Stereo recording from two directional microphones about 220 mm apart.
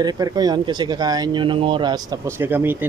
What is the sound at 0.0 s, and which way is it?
Speech, 15° right (ahead or behind).